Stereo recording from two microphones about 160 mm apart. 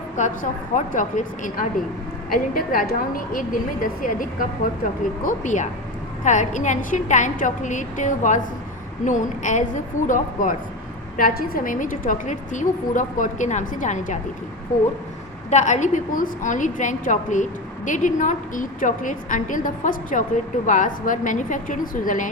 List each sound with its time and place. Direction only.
0.2 s a woman's voice: 55° left (ahead or behind)
15.4 s a woman's voice: 50° left (ahead or behind)